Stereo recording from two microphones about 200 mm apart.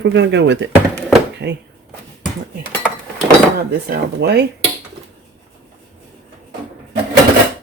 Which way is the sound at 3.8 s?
55° right (ahead or behind).